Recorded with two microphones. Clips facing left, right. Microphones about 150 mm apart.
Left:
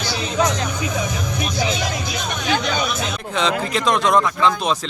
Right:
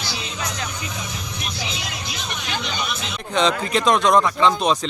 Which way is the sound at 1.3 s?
50° left (ahead or behind).